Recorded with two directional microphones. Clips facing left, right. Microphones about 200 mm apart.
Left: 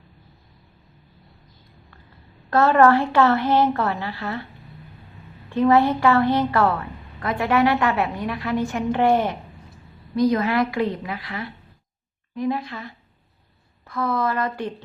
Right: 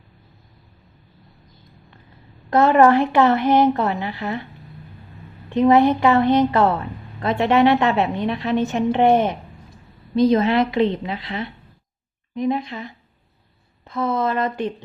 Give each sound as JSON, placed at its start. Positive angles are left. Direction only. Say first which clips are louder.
{"t": 2.5, "sound": "a woman's voice", "louder": "right 2 dB", "side_deg": -20}
{"t": 5.5, "sound": "a woman's voice", "louder": "right 3 dB", "side_deg": -20}